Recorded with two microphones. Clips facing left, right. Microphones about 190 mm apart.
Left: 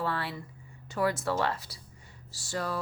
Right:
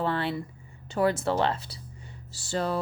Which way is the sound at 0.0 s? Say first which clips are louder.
Right 5 dB; 25° right (ahead or behind).